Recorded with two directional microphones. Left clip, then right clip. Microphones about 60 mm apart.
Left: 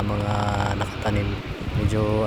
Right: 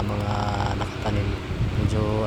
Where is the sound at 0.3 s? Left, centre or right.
Left.